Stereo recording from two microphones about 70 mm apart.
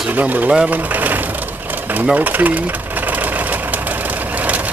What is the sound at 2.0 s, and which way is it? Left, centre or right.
Sewing machine, right.